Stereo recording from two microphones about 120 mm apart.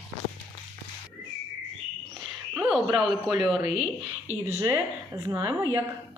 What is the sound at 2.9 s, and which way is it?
Speech, centre (ahead or behind).